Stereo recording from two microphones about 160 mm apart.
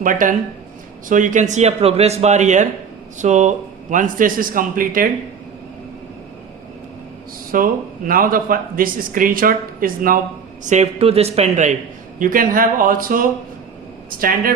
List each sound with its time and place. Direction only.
0.0 s a man's voice: 55° right (ahead or behind)
7.5 s speech: 60° right (ahead or behind)
10.6 s a man's voice: 50° right (ahead or behind)
12.2 s speech: 60° right (ahead or behind)